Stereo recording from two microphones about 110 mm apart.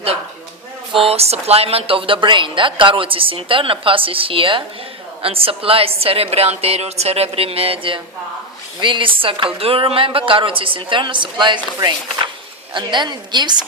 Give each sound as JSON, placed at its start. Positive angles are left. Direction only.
{"t": 0.9, "sound": "a woman's voice", "side_deg": -65}